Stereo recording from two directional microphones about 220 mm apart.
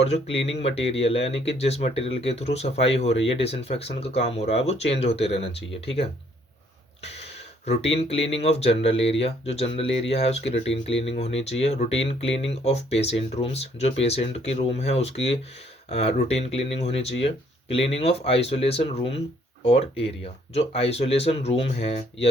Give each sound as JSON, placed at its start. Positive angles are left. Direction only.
{"t": 0.0, "sound": "speech", "side_deg": 25}
{"t": 7.9, "sound": "speech", "side_deg": 25}